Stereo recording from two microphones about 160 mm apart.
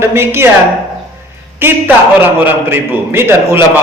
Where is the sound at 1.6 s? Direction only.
15° right (ahead or behind).